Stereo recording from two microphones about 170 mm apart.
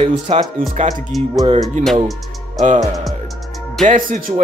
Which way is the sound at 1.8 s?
45° right (ahead or behind).